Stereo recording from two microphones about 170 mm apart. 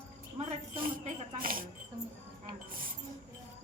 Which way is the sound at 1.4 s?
55° right (ahead or behind).